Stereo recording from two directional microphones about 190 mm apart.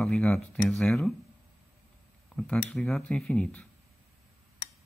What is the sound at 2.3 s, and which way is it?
Speech, 5° left (ahead or behind).